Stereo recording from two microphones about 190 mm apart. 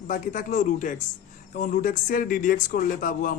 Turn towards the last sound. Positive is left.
turn(degrees=45)  # may be behind; listen again after turning